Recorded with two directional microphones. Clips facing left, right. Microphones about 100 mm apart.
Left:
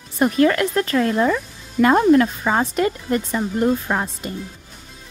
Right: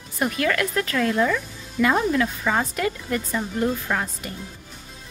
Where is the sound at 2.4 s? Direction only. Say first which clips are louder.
Left 4 dB; 30° left (ahead or behind).